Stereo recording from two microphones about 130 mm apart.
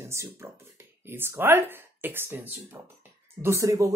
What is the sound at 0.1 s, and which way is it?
Speech, 20° right (ahead or behind).